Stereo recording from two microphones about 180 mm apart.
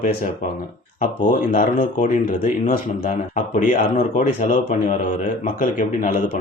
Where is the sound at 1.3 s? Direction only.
45° left (ahead or behind).